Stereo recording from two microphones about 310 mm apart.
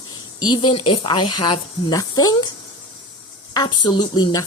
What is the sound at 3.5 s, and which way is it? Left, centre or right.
Speech, centre.